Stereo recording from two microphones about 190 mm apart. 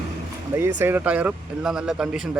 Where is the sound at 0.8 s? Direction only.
10° right (ahead or behind).